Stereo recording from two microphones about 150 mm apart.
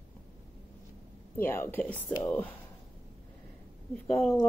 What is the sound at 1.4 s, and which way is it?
Speech, 15° left (ahead or behind).